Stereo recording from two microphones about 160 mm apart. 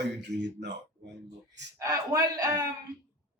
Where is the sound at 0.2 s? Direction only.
90° right.